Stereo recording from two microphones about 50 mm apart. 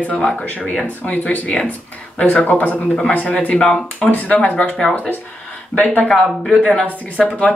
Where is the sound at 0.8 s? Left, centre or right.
Left.